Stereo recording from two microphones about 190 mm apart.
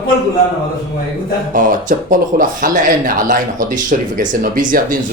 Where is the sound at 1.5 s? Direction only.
45° right (ahead or behind).